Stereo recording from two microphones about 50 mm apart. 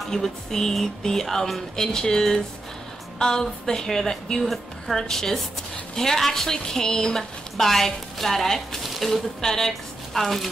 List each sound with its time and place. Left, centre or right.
0.0 s a woman's voice: centre